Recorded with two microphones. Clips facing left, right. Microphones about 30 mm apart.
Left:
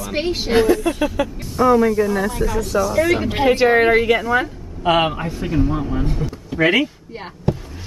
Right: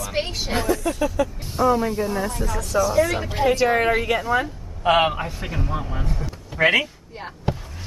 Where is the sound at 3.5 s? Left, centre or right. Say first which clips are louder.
Left 5 dB; left.